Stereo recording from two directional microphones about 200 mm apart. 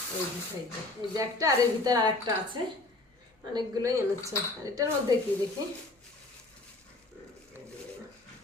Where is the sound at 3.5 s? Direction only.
20° right (ahead or behind).